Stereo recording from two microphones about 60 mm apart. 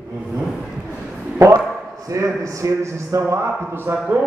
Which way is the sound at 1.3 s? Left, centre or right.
Right.